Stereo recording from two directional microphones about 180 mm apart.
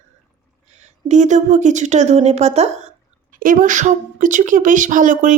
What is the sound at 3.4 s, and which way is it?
Speech, 50° right (ahead or behind).